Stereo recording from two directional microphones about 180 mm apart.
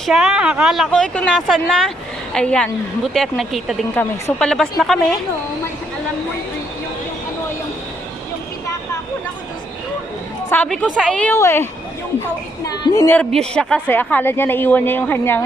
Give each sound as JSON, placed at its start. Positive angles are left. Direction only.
{"t": 0.0, "sound": "a woman's voice", "side_deg": 0}
{"t": 10.5, "sound": "a woman's voice", "side_deg": 10}
{"t": 13.1, "sound": "speech", "side_deg": 5}